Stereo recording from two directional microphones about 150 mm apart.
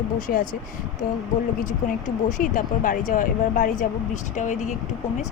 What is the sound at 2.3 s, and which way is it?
A woman's voice, 60° left (ahead or behind).